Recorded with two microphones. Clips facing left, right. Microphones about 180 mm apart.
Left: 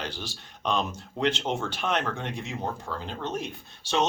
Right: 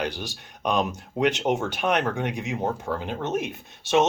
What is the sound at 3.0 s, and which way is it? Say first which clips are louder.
Speech: right 4 dB; 45° right (ahead or behind).